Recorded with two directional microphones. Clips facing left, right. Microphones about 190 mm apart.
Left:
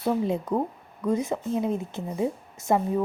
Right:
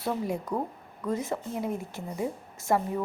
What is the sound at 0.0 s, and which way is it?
A woman's voice, 25° left (ahead or behind).